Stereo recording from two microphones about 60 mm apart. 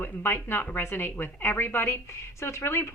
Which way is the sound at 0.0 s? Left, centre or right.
Left.